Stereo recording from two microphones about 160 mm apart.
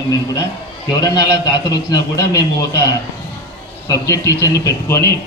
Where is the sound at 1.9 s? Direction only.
25° left (ahead or behind).